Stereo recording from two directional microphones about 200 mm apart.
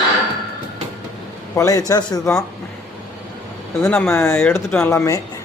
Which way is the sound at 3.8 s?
10° left (ahead or behind).